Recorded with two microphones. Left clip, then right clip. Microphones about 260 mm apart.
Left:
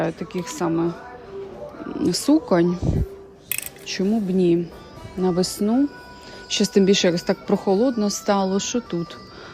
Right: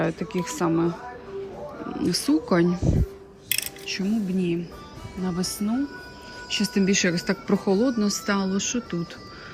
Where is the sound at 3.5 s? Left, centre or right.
Left.